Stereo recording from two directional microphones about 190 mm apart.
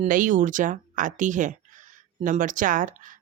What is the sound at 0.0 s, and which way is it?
Speech, 40° right (ahead or behind).